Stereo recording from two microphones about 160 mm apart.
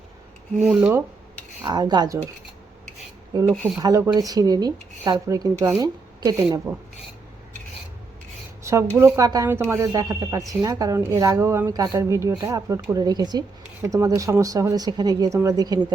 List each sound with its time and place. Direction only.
0.6 s speech: 5° right (ahead or behind)
1.6 s speech: 25° right (ahead or behind)
3.3 s speech: 25° right (ahead or behind)
9.0 s speech: 20° right (ahead or behind)